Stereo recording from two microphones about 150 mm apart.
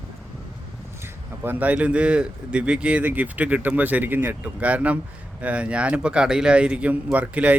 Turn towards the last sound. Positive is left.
turn(degrees=-10)  # may be behind; listen again after turning